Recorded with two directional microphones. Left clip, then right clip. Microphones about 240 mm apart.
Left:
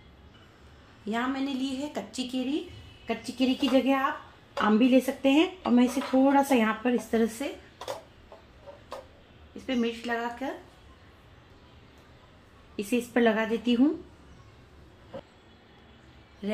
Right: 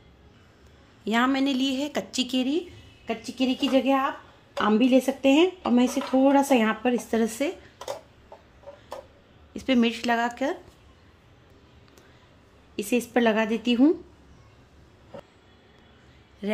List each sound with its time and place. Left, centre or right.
1.0 s speech: right
9.7 s speech: right
12.7 s speech: right